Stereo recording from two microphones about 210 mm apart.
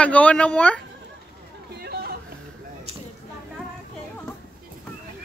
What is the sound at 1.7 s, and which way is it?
Hubbub, 50° right (ahead or behind).